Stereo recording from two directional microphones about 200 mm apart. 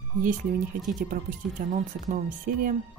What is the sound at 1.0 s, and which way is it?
Speech, 40° right (ahead or behind).